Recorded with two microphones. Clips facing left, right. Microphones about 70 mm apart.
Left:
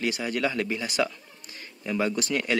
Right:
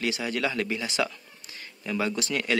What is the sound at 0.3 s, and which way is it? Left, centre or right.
Speech, left.